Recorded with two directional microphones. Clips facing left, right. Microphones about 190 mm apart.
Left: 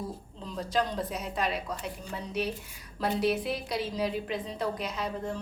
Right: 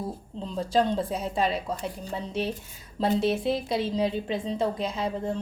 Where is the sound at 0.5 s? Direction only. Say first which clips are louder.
Right 5 dB; 30° right (ahead or behind).